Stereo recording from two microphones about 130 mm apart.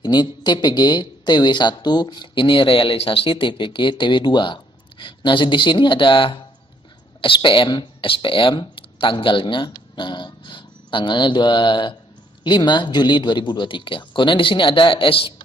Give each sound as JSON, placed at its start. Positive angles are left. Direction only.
{"t": 0.0, "sound": "speech", "side_deg": 35}